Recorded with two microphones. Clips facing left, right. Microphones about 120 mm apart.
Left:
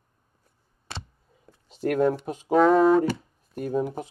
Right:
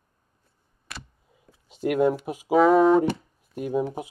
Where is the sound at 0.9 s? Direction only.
30° left (ahead or behind).